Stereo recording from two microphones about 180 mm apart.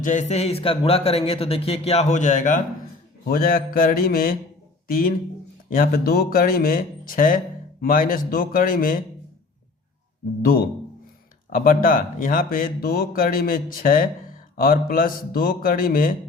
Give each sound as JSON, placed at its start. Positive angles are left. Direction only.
{"t": 0.0, "sound": "a man's voice", "side_deg": 45}
{"t": 3.2, "sound": "speech", "side_deg": 55}
{"t": 11.5, "sound": "speech", "side_deg": 50}